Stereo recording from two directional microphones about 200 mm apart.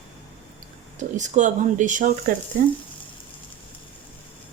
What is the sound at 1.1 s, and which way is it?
Speech, 35° right (ahead or behind).